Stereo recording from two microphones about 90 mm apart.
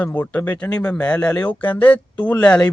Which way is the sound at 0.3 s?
15° left (ahead or behind).